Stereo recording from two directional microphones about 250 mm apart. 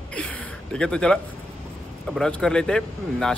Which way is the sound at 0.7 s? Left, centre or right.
Centre.